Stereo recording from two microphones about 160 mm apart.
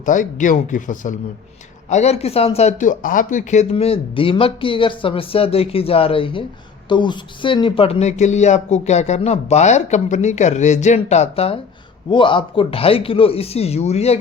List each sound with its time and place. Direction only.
0.0 s speech: 55° left (ahead or behind)